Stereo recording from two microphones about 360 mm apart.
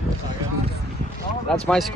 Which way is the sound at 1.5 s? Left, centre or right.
Centre.